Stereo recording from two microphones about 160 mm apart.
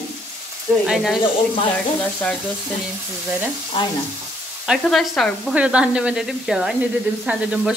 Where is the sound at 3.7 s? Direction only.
30° left (ahead or behind).